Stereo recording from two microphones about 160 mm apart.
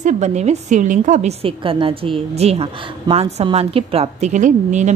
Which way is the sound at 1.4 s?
35° right (ahead or behind).